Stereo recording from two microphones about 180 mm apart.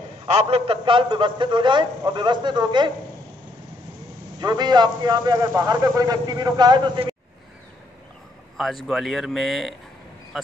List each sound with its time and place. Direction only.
0.3 s a man's voice: 35° right (ahead or behind)
4.4 s a man's voice: 25° right (ahead or behind)
8.5 s speech: centre (ahead or behind)